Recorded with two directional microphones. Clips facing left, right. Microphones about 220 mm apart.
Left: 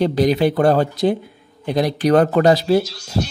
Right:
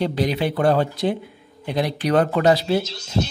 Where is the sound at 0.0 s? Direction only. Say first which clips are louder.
Left 6 dB; 45° left (ahead or behind).